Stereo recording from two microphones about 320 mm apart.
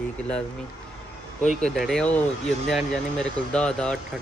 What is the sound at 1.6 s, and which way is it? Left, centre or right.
Speech, centre.